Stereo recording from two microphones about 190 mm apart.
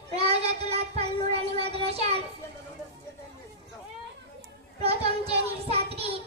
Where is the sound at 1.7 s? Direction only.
30° right (ahead or behind).